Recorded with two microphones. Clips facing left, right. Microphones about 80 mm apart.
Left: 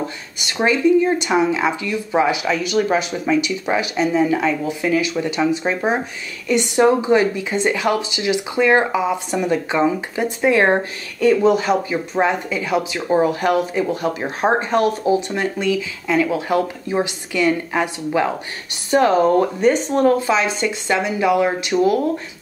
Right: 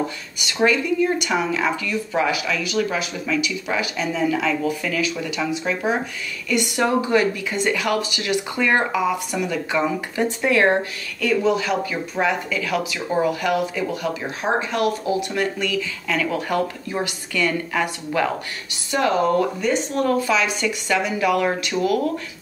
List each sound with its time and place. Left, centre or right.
0.4 s speech: left
2.4 s speech: left
4.6 s speech: left
5.2 s speech: left
13.2 s speech: left; by 18.3 s centre
18.9 s speech: left; by 21.9 s centre